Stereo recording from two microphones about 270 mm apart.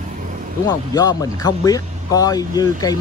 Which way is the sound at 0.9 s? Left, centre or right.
Centre.